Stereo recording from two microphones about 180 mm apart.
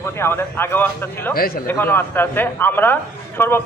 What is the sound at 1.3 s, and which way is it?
Speech, 55° left (ahead or behind).